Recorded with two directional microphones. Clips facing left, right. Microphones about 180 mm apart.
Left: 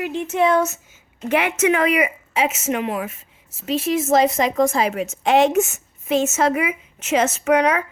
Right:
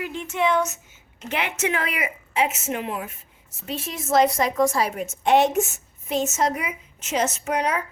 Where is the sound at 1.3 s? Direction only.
90° left.